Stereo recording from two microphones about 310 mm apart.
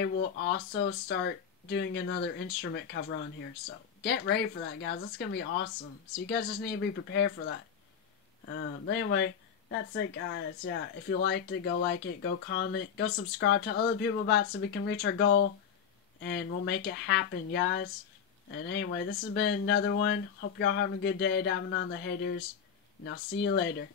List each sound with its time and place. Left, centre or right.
0.0 s speech: left